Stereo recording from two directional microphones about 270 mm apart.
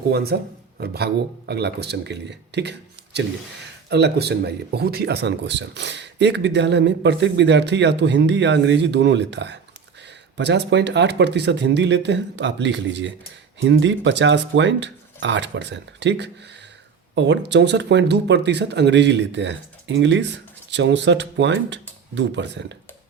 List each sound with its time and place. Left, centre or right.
0.1 s speech: right